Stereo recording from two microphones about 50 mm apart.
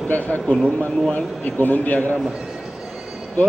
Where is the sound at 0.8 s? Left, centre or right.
Left.